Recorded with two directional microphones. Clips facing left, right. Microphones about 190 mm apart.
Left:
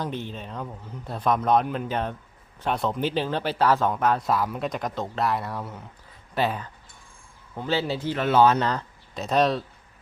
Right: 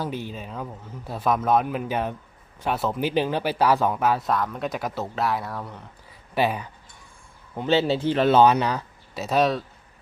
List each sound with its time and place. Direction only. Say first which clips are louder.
0.0 s a man's voice: right 1 dB; 5° right (ahead or behind)
4.7 s a man's voice: right 1 dB; 5° right (ahead or behind)
6.3 s speech: right 2 dB; 10° right (ahead or behind); by 8.4 s 30° right (ahead or behind)
8.4 s speech: right 1 dB; 10° right (ahead or behind)